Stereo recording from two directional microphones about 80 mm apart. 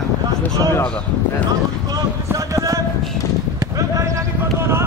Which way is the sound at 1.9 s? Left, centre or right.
Right.